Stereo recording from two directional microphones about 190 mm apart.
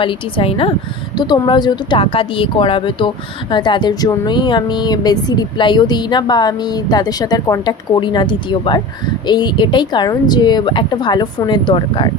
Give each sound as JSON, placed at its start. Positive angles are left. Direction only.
{"t": 0.0, "sound": "a woman's voice", "side_deg": 25}